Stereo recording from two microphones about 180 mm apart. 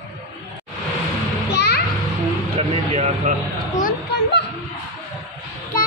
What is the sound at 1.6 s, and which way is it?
Music, 65° left (ahead or behind).